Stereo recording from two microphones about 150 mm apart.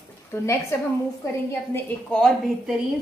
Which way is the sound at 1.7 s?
5° left (ahead or behind).